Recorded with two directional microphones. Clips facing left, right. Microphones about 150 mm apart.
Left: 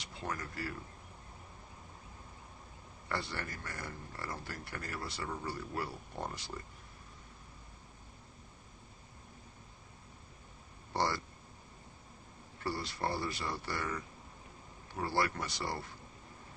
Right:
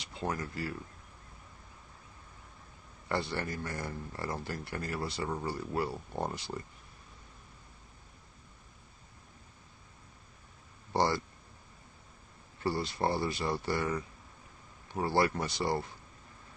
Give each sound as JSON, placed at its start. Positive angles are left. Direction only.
{"t": 0.2, "sound": "speech", "side_deg": -25}
{"t": 3.1, "sound": "speech", "side_deg": -25}
{"t": 10.9, "sound": "speech", "side_deg": -25}
{"t": 12.6, "sound": "speech", "side_deg": -25}